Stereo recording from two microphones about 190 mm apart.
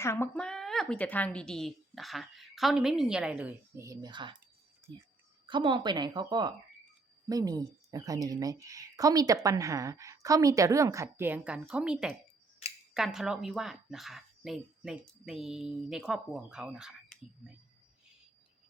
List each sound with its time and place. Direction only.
0.0 s a woman's voice: 10° left (ahead or behind); by 4.4 s 25° right (ahead or behind)
5.5 s a woman's voice: 25° right (ahead or behind); by 17.2 s 5° right (ahead or behind)